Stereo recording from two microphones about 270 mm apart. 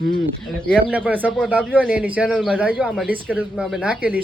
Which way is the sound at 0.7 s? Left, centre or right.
Centre.